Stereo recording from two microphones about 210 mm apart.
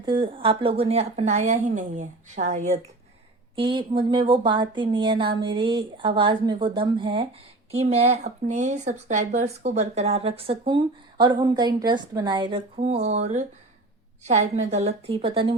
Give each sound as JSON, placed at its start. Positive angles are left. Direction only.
{"t": 0.0, "sound": "speech", "side_deg": -20}
{"t": 3.5, "sound": "speech", "side_deg": -25}